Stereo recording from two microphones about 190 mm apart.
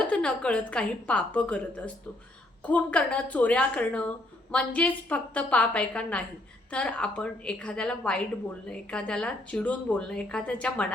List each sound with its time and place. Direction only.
0.1 s a woman's voice: 5° left (ahead or behind)